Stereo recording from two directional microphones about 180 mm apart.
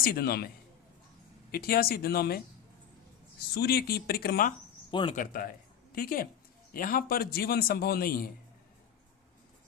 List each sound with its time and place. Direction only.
0.0 s a man's voice: 60° left (ahead or behind)
3.5 s a man's voice: 60° left (ahead or behind)
4.9 s speech: 25° left (ahead or behind)
5.1 s a man's voice: 50° left (ahead or behind)